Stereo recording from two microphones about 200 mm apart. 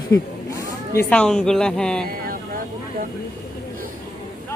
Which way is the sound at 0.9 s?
5° left (ahead or behind).